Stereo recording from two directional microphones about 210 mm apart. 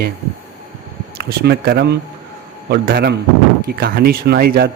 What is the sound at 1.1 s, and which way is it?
Speech, 50° right (ahead or behind).